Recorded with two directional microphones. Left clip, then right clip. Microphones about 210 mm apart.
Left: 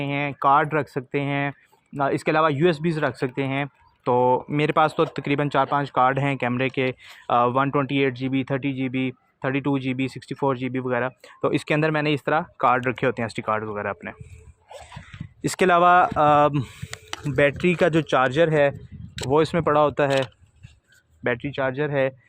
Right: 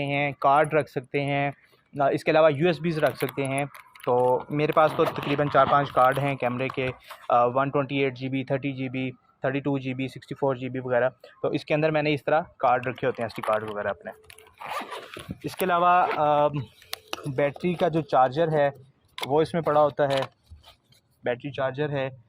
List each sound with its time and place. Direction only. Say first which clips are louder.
0.0 s speech: left 1 dB; 40° left (ahead or behind); by 14.2 s 60° left (ahead or behind)
15.4 s speech: left 5 dB; 55° left (ahead or behind)
18.0 s speech: even; 90° left
18.3 s speech: left 4 dB; 45° left (ahead or behind)
21.2 s speech: left 3 dB; 40° left (ahead or behind)